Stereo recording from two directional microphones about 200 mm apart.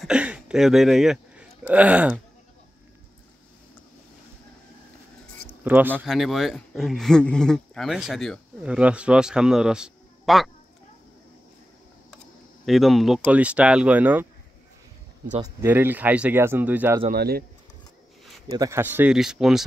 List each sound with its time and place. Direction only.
0.0 s a sound: 5° right (ahead or behind)
1.7 s speech: 5° right (ahead or behind)
5.5 s speech: 10° right (ahead or behind)
12.6 s speech: centre (ahead or behind)
15.4 s speech: 10° right (ahead or behind)
17.1 s speech: 50° right (ahead or behind)
18.5 s speech: 15° right (ahead or behind)